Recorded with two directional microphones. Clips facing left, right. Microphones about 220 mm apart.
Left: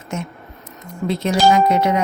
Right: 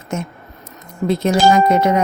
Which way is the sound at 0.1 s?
45° right (ahead or behind).